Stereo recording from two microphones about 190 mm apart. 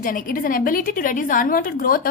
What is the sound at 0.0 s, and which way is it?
A woman's voice, 45° left (ahead or behind).